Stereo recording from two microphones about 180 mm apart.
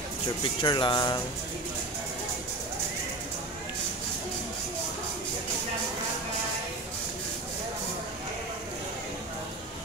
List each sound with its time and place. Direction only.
0.6 s speech: 25° left (ahead or behind)